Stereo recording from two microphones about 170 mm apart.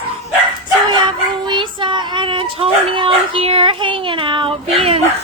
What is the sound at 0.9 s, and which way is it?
Child singing, 25° right (ahead or behind).